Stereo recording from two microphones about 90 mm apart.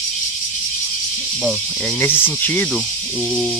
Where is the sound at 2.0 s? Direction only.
20° left (ahead or behind).